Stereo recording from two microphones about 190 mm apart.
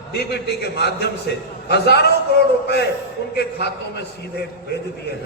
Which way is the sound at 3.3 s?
60° left (ahead or behind).